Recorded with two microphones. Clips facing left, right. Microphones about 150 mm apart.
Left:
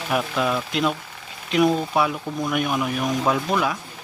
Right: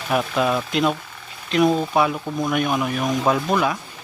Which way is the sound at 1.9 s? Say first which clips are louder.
Right 2 dB; 5° left (ahead or behind).